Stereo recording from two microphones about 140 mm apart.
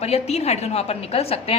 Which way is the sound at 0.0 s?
50° left (ahead or behind).